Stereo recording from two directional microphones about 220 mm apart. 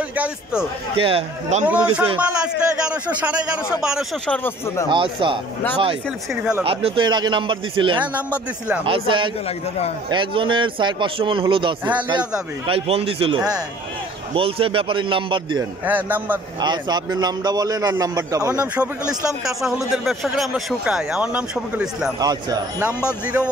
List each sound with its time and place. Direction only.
0.1 s a man's voice: 5° right (ahead or behind)
0.9 s speech: 25° right (ahead or behind)
2.0 s a man's voice: 5° right (ahead or behind); by 4.8 s 10° left (ahead or behind)
4.8 s speech: 20° right (ahead or behind)
6.6 s speech: 25° right (ahead or behind)
8.0 s a man's voice: 5° right (ahead or behind)
8.8 s speech: 25° right (ahead or behind)
15.8 s a man's voice: 10° right (ahead or behind)
16.5 s a man's voice: 20° right (ahead or behind)
22.2 s a man's voice: 15° right (ahead or behind)